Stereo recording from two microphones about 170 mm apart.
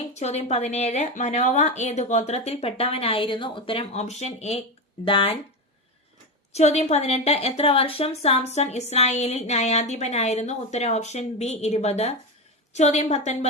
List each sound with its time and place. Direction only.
0.0 s a woman's voice: 40° left (ahead or behind)
6.5 s a woman's voice: 40° left (ahead or behind)